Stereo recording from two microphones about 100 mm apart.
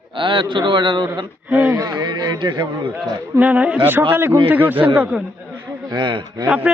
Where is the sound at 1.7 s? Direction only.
40° right (ahead or behind).